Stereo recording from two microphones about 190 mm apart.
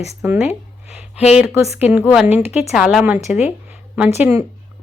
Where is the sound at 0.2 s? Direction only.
5° right (ahead or behind).